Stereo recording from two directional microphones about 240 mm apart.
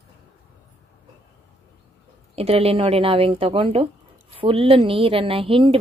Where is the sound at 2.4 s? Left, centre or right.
Right.